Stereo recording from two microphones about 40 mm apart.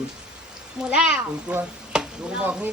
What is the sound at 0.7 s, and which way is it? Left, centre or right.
Speech, right.